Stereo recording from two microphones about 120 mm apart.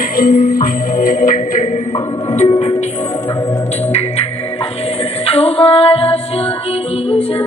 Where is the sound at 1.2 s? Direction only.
90° left.